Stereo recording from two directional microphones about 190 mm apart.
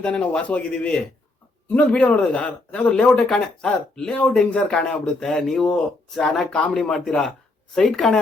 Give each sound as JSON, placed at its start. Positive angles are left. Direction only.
{"t": 0.0, "sound": "speech", "side_deg": 5}